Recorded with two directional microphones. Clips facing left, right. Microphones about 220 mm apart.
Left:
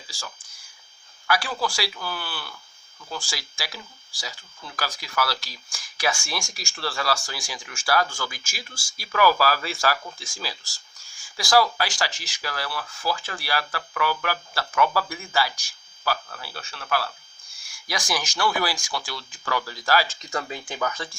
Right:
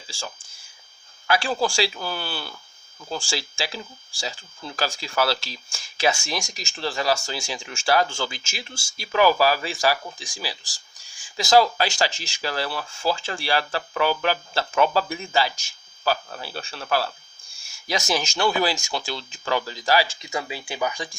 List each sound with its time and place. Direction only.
0.1 s speech: 25° right (ahead or behind)